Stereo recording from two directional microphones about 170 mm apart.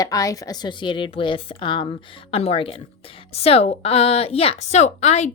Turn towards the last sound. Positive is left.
turn(degrees=40)  # may be behind; listen again after turning